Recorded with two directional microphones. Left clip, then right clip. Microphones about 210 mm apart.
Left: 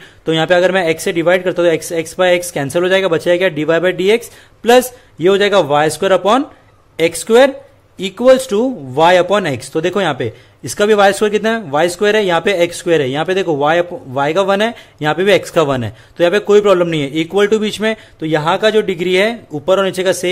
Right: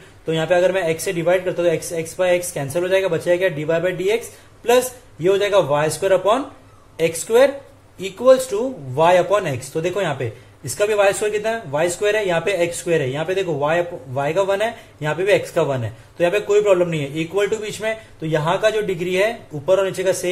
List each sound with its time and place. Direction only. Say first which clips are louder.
0.2 s a man's voice: left 5 dB; 50° left (ahead or behind)